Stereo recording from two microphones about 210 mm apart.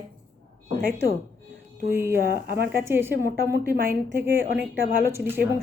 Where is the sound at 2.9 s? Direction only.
10° right (ahead or behind).